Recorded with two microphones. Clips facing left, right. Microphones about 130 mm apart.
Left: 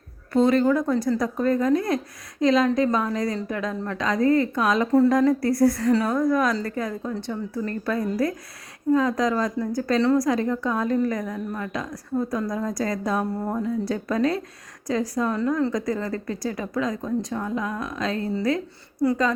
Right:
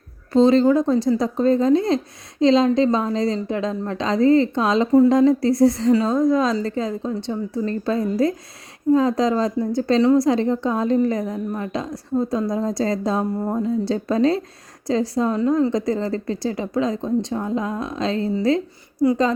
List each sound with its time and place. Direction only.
0.3 s a woman's voice: 25° right (ahead or behind)
19.0 s speech: 15° right (ahead or behind)